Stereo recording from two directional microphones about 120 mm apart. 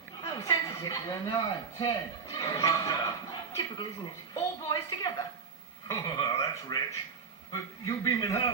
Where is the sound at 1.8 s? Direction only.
30° left (ahead or behind).